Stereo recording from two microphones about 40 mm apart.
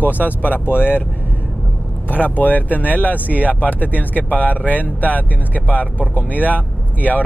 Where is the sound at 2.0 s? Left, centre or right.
Left.